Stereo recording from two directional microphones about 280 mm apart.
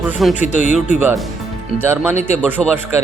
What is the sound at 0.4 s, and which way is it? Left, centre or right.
Speech, left.